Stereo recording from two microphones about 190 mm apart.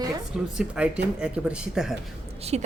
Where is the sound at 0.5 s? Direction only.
5° right (ahead or behind).